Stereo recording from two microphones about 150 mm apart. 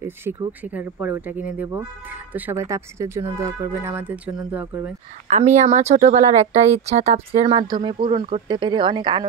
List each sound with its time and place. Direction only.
0.0 s speech: 15° right (ahead or behind)
5.3 s speech: 50° right (ahead or behind); by 9.3 s 30° right (ahead or behind)